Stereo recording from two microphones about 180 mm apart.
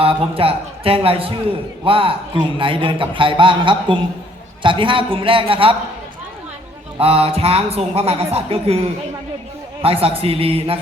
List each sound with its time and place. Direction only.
0.0 s a man's voice: 30° right (ahead or behind)
7.0 s speech: 30° right (ahead or behind)
9.8 s speech: 30° right (ahead or behind)